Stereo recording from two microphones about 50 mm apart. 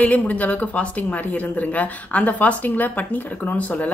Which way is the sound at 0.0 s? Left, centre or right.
Left.